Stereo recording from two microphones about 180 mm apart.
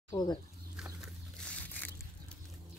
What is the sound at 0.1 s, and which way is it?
Speech, 25° left (ahead or behind).